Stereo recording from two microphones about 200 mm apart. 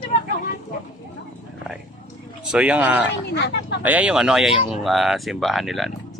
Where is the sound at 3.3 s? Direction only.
60° left (ahead or behind).